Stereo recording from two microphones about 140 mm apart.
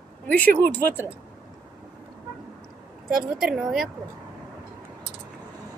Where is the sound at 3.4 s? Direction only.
Centre (ahead or behind).